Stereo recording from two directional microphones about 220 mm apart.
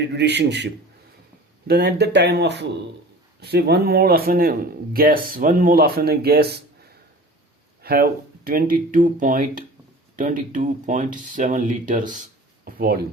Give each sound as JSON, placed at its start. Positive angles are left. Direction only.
{"t": 0.1, "sound": "a man's voice", "side_deg": -50}
{"t": 7.8, "sound": "a sound", "side_deg": -45}
{"t": 8.4, "sound": "speech", "side_deg": -40}